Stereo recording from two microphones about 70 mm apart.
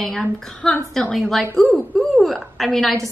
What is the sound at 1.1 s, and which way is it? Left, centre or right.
A woman's voice, centre.